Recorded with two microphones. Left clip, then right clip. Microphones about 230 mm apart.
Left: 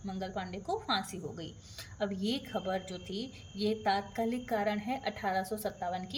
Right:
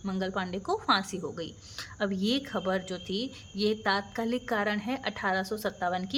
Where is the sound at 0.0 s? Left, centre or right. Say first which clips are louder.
Right 6 dB; centre.